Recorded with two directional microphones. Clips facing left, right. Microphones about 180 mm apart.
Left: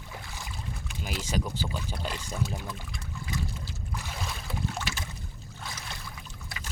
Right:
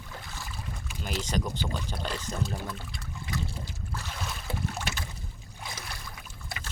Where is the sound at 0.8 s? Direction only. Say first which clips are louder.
Right 2 dB; 5° left (ahead or behind).